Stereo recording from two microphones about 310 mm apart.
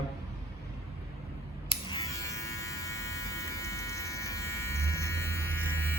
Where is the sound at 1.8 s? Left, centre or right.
Centre.